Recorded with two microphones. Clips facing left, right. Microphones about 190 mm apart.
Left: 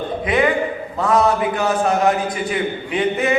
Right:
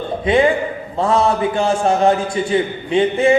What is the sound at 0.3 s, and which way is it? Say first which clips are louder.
A man's voice: right 3 dB; 30° right (ahead or behind).